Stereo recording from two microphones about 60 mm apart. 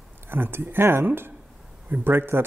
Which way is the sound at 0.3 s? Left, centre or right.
Right.